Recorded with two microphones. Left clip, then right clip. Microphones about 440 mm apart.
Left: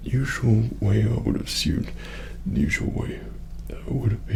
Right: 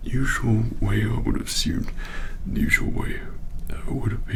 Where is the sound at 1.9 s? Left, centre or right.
Left.